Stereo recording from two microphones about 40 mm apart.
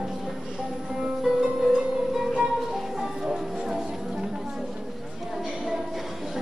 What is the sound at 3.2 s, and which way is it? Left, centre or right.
Music, centre.